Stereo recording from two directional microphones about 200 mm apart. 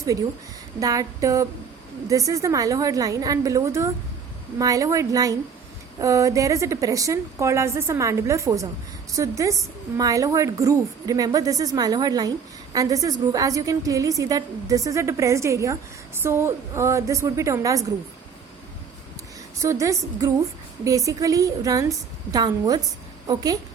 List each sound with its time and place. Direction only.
0.8 s a woman's voice: 15° right (ahead or behind)
19.6 s a woman's voice: 15° right (ahead or behind)